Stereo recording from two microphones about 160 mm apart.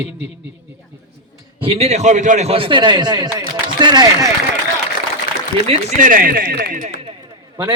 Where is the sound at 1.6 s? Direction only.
40° right (ahead or behind).